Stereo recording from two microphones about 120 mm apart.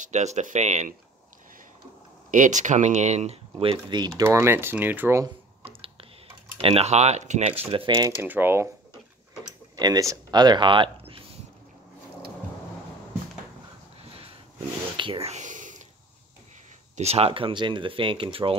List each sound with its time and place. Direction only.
0.0 s speech: 75° right (ahead or behind)
2.3 s speech: 90° right; by 4.1 s 40° right (ahead or behind)
4.2 s speech: 20° right (ahead or behind)
5.6 s typing: 50° right (ahead or behind); by 7.5 s 75° right (ahead or behind)
7.7 s speech: 40° right (ahead or behind)
8.2 s speech: 15° right (ahead or behind)
9.8 s speech: 30° right (ahead or behind)
15.0 s a sound: 50° right (ahead or behind); by 15.8 s 90° right
16.9 s speech: 60° right (ahead or behind)